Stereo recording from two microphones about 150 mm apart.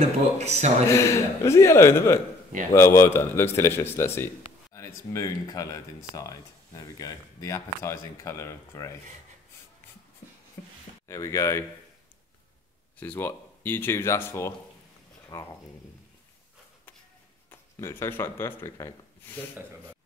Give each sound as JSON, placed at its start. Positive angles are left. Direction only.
{"t": 0.0, "sound": "speech", "side_deg": -45}
{"t": 0.8, "sound": "a man's voice", "side_deg": 20}
{"t": 6.8, "sound": "speech", "side_deg": 25}
{"t": 11.1, "sound": "speech", "side_deg": 20}
{"t": 13.0, "sound": "a man's voice", "side_deg": 10}
{"t": 17.5, "sound": "speech", "side_deg": 15}